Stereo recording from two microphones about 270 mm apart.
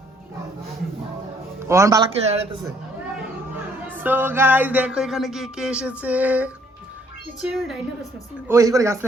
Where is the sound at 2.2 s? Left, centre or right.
Right.